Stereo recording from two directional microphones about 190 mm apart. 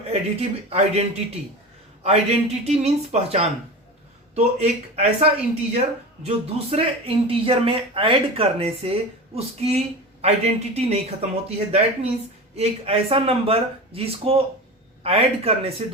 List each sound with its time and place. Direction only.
0.1 s speech: 35° right (ahead or behind)